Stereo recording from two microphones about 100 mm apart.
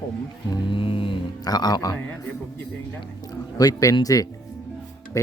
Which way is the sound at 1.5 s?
45° left (ahead or behind).